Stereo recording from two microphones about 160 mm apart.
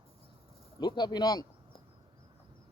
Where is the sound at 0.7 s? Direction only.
30° left (ahead or behind).